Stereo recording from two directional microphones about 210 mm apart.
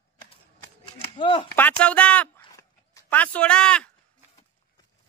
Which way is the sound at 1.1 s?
25° left (ahead or behind).